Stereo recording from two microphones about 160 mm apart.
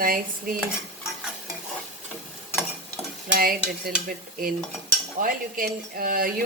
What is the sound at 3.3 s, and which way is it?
Speech, 65° right (ahead or behind).